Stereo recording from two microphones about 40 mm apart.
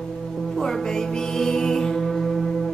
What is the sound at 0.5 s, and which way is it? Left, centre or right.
Music, centre.